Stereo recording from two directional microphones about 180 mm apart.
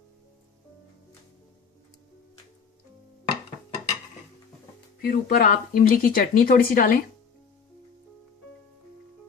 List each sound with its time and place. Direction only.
5.0 s speech: 50° left (ahead or behind)